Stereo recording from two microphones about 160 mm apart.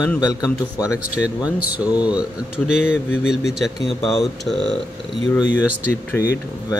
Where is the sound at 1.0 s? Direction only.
10° right (ahead or behind).